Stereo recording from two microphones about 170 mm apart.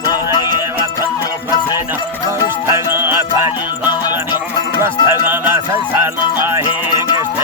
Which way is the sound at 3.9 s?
25° left (ahead or behind).